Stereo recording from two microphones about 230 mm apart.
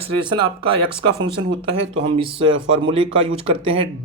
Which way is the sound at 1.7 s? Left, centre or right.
Right.